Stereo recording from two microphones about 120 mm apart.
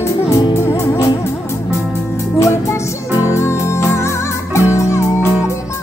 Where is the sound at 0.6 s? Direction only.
20° left (ahead or behind).